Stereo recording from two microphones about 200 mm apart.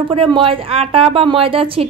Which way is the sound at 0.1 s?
25° right (ahead or behind).